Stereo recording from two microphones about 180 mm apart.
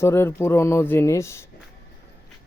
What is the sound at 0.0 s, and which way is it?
Speech, 15° left (ahead or behind).